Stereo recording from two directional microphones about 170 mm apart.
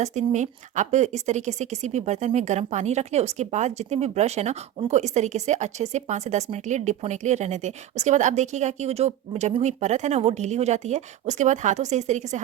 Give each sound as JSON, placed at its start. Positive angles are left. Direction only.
{"t": 0.0, "sound": "a woman's voice", "side_deg": -40}